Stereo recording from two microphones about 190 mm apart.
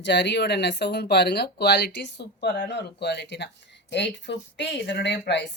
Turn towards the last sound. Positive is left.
turn(degrees=65)  # may be behind; listen again after turning